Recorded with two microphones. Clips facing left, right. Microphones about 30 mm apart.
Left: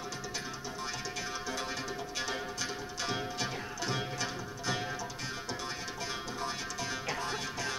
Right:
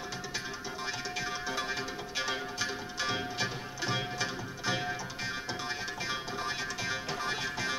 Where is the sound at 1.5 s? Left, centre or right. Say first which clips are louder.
Right 2 dB; centre.